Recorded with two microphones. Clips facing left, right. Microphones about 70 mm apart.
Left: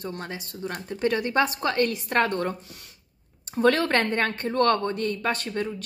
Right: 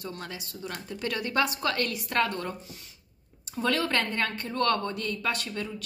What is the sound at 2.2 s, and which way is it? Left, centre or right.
Speech, left.